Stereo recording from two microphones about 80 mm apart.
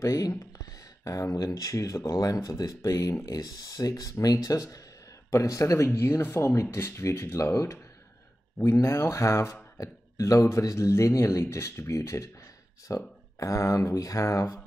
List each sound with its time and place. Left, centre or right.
0.0 s speech: left